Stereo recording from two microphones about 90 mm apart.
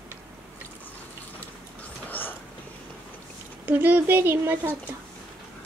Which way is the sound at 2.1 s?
20° left (ahead or behind).